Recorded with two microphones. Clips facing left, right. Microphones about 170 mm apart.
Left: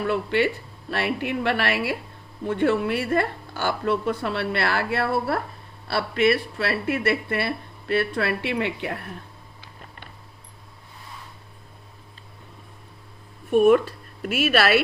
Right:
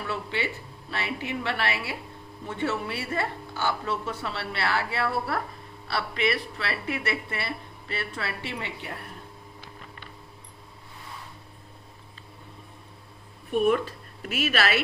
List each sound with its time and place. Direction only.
0.1 s speech: 55° left (ahead or behind)
5.0 s speech: 35° left (ahead or behind)
6.0 s speech: 50° left (ahead or behind); by 9.0 s 70° left (ahead or behind)
13.5 s a woman's voice: 45° left (ahead or behind)